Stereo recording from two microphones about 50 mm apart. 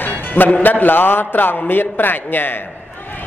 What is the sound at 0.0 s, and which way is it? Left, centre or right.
A man's voice, left.